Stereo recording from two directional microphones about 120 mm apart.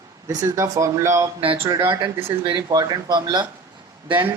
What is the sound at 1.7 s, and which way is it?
Speech, 40° right (ahead or behind).